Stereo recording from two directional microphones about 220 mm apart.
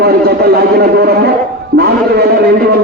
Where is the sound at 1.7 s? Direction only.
45° right (ahead or behind).